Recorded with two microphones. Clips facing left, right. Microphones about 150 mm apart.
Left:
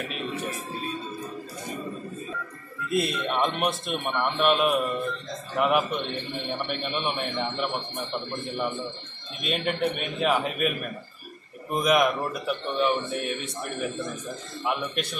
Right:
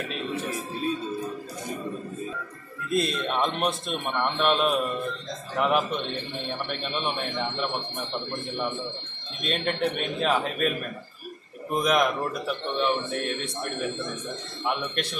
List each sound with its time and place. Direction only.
2.9 s a man's voice: 5° left (ahead or behind)